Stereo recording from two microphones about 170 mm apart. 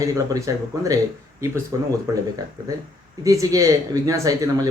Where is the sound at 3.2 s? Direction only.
20° right (ahead or behind).